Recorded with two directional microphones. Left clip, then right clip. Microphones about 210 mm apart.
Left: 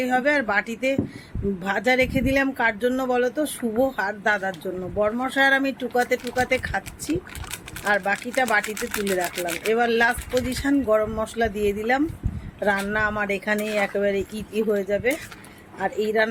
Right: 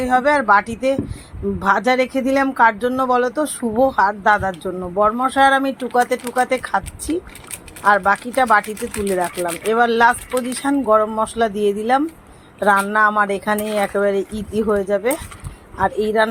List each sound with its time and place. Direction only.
0.0 s speech: 10° right (ahead or behind)
7.9 s speech: 5° right (ahead or behind)